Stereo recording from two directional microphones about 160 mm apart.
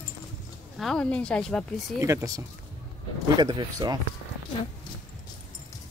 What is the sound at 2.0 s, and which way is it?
Speech, 20° right (ahead or behind).